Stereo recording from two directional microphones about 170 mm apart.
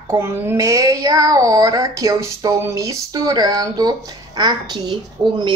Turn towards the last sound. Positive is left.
turn(degrees=-25)  # may be behind; listen again after turning